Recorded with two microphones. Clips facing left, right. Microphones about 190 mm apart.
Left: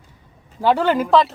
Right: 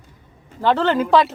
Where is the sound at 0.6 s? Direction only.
10° left (ahead or behind).